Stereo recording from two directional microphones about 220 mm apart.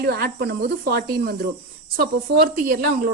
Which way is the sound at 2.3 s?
45° right (ahead or behind).